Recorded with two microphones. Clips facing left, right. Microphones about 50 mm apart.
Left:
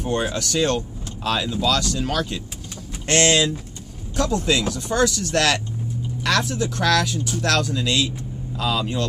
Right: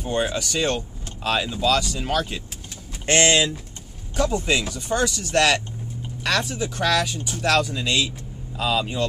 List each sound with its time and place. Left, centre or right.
0.0 s speech: centre